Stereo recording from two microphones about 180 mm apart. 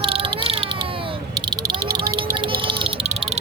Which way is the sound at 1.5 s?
20° right (ahead or behind).